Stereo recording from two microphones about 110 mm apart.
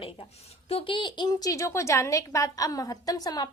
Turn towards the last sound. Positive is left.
turn(degrees=35)  # may be behind; listen again after turning